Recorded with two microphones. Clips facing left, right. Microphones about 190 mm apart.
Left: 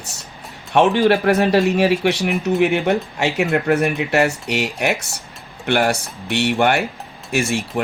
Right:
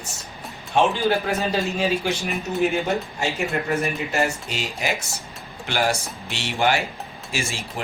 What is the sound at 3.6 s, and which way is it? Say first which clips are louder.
Speech: left 7 dB; 65° left (ahead or behind).